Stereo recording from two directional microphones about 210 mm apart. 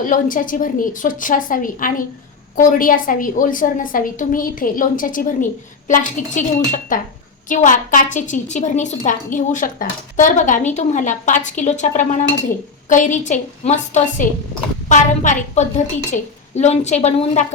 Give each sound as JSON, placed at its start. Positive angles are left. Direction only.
{"t": 0.0, "sound": "a woman's voice", "side_deg": 40}